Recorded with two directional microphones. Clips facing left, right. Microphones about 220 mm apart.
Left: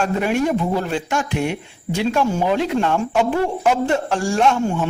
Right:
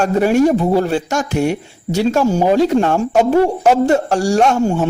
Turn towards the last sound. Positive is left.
turn(degrees=-40)  # may be behind; listen again after turning